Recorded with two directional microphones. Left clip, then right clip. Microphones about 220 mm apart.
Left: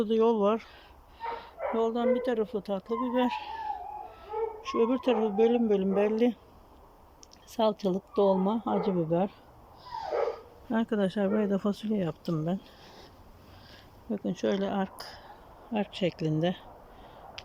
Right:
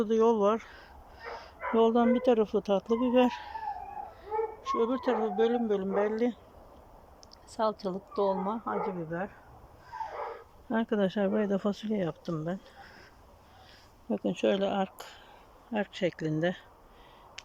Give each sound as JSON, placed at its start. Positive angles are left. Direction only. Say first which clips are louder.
{"t": 0.0, "sound": "speech", "louder": "even", "side_deg": 0}
{"t": 1.2, "sound": "a sound", "louder": "left 6 dB", "side_deg": 0}
{"t": 1.7, "sound": "speech", "louder": "right 3 dB", "side_deg": -10}
{"t": 7.5, "sound": "speech", "louder": "left 3 dB", "side_deg": 10}
{"t": 9.9, "sound": "dog", "louder": "left 4 dB", "side_deg": 20}
{"t": 10.7, "sound": "speech", "louder": "even", "side_deg": 0}
{"t": 14.1, "sound": "speech", "louder": "right 2 dB", "side_deg": -5}